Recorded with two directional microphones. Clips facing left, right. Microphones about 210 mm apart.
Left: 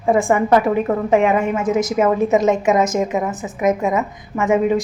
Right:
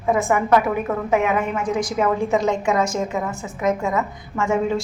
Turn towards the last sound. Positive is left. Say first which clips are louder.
# left 4 dB
turn(degrees=20)  # may be behind; listen again after turning